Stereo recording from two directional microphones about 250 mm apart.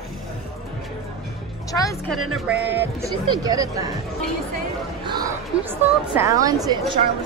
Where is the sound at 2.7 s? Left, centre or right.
Centre.